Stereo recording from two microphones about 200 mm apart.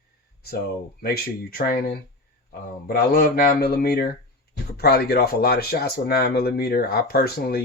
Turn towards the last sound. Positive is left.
turn(degrees=50)  # may be behind; listen again after turning